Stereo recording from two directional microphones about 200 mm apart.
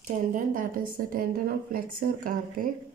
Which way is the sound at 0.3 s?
40° right (ahead or behind).